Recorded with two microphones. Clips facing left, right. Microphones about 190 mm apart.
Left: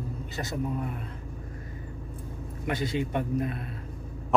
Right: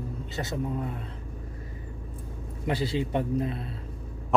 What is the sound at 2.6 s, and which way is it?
Speech, 30° right (ahead or behind).